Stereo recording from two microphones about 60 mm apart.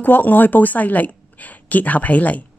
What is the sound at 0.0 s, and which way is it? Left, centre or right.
A woman's voice, left.